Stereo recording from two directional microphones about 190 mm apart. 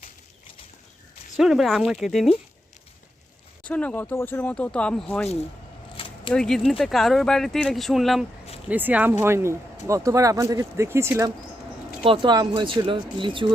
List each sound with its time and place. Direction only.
1.4 s speech: centre (ahead or behind)
3.6 s speech: 5° left (ahead or behind)
6.0 s a sound: 30° left (ahead or behind)
6.3 s speech: 5° left (ahead or behind); by 11.1 s 15° right (ahead or behind)
12.0 s speech: 25° right (ahead or behind)